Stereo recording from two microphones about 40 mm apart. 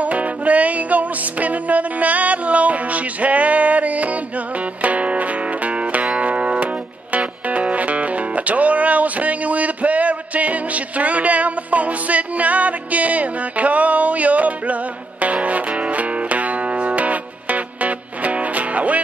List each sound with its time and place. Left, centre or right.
0.0 s music: right